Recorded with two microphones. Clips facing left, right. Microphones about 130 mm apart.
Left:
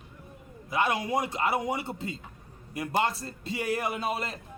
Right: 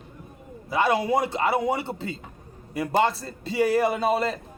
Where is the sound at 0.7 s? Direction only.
35° right (ahead or behind).